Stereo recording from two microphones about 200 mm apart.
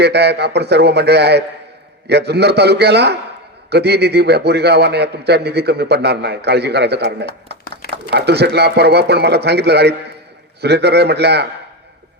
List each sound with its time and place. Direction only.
0.0 s a man's voice: 55° right (ahead or behind)